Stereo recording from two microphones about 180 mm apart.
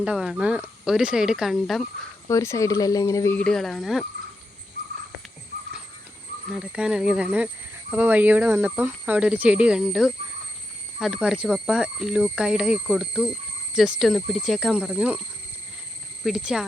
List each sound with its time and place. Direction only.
0.0 s speech: 5° right (ahead or behind)
2.2 s speech: 15° left (ahead or behind); by 4.0 s centre (ahead or behind)
6.5 s speech: 5° right (ahead or behind)
16.2 s speech: 5° right (ahead or behind)